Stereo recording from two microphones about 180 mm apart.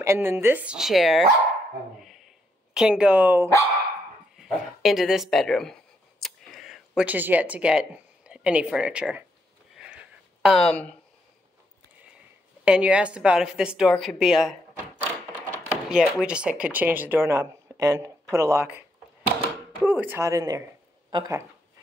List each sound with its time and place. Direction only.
0.0 s speech: 15° right (ahead or behind)
2.0 s dog: centre (ahead or behind)
4.4 s speech: centre (ahead or behind)
9.8 s a sound: 5° right (ahead or behind)
12.6 s a woman's voice: 5° right (ahead or behind)
15.9 s speech: 5° right (ahead or behind)